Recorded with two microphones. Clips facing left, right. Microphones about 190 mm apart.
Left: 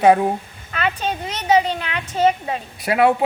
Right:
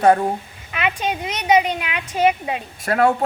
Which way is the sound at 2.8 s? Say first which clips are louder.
Left 1 dB; 5° left (ahead or behind).